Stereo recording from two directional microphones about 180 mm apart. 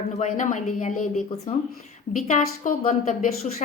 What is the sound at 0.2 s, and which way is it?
A woman's voice, 45° left (ahead or behind).